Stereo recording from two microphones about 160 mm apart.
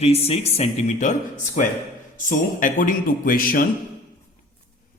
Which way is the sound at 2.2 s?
55° left (ahead or behind).